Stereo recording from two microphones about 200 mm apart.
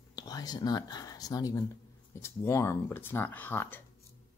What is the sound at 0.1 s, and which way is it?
Speech, 20° left (ahead or behind).